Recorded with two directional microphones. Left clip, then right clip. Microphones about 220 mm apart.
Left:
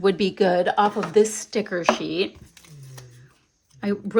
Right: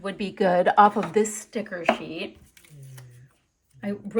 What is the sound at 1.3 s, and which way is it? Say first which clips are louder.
Speech: left 6 dB; 15° left (ahead or behind).